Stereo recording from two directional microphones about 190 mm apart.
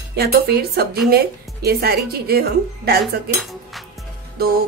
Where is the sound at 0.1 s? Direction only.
55° right (ahead or behind).